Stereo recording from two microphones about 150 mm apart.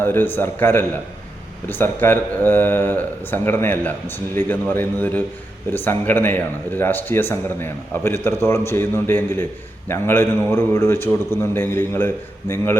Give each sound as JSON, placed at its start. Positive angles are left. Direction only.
{"t": 0.0, "sound": "a man's voice", "side_deg": 15}